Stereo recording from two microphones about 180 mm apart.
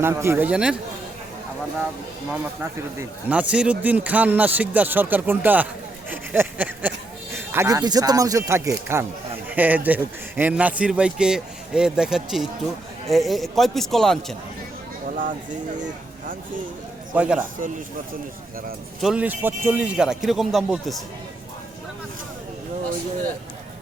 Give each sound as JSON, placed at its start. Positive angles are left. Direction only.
{"t": 0.0, "sound": "speech", "side_deg": -15}
{"t": 2.3, "sound": "speech", "side_deg": -10}
{"t": 6.1, "sound": "a sound", "side_deg": -10}
{"t": 7.3, "sound": "a man's voice", "side_deg": -15}
{"t": 17.2, "sound": "a man's voice", "side_deg": -5}
{"t": 19.0, "sound": "a man's voice", "side_deg": -10}